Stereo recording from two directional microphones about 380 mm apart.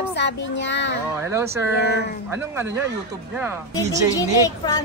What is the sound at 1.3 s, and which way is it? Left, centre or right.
Speech, centre.